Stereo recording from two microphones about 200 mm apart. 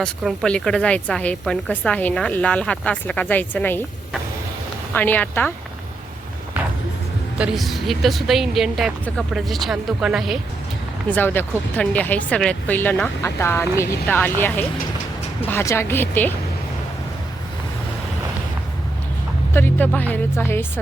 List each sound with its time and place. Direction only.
0.0 s a woman's voice: 5° left (ahead or behind)
4.9 s speech: 10° left (ahead or behind)
7.3 s a woman's voice: 5° right (ahead or behind)
11.1 s speech: 10° left (ahead or behind)
19.5 s speech: 10° left (ahead or behind)